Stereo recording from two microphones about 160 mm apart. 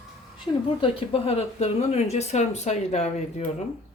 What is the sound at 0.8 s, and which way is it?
Speech, 35° left (ahead or behind).